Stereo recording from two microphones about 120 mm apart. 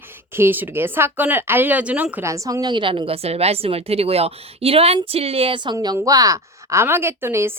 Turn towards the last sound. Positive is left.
turn(degrees=-20)  # may be behind; listen again after turning